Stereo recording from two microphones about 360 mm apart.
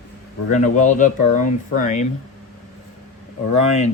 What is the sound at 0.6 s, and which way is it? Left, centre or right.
Speech, left.